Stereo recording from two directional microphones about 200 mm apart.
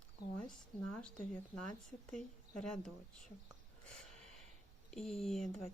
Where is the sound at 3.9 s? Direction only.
5° left (ahead or behind).